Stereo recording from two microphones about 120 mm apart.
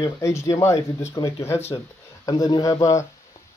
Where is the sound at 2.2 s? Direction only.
30° left (ahead or behind).